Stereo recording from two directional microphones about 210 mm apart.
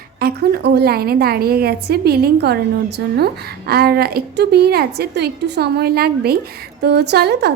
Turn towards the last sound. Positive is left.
turn(degrees=-50)  # may be behind; listen again after turning